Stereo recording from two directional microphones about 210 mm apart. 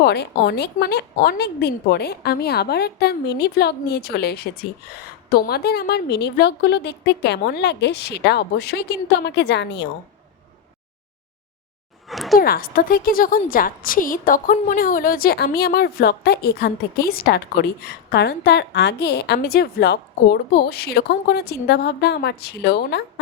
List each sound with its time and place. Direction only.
0.0 s a woman's voice: 50° left (ahead or behind)
12.0 s a sound: centre (ahead or behind)
12.4 s a woman's voice: 45° left (ahead or behind)